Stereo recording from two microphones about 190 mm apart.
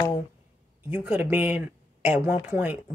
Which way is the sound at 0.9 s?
10° right (ahead or behind).